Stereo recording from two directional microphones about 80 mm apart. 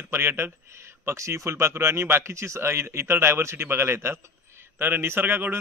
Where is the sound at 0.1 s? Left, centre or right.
Right.